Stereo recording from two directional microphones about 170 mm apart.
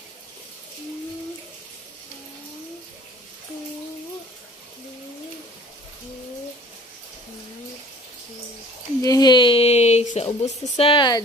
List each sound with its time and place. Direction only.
9.0 s speech: 20° left (ahead or behind)